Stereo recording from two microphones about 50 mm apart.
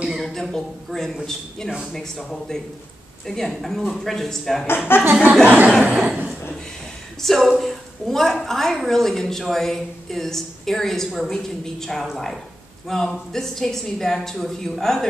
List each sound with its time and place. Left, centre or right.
0.1 s a man's voice: centre
4.9 s chuckle: left
5.2 s speech: right
7.2 s a woman's voice: centre